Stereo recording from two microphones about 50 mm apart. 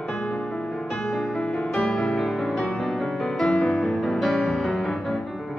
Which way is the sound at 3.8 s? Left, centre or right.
Centre.